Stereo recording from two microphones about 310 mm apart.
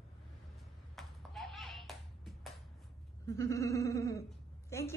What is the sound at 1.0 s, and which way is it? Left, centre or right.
Music, centre.